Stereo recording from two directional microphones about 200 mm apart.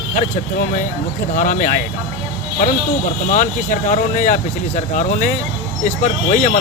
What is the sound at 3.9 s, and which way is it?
Speech, 40° left (ahead or behind).